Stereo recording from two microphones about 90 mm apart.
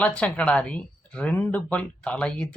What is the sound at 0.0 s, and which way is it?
Speech, 15° left (ahead or behind).